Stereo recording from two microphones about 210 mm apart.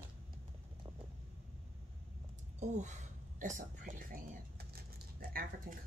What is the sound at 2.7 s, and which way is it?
A woman's voice, 35° right (ahead or behind).